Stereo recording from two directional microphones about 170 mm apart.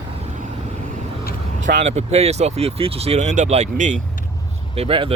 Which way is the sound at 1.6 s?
40° right (ahead or behind).